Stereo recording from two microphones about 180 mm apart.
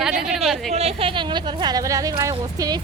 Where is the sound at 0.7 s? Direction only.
35° right (ahead or behind).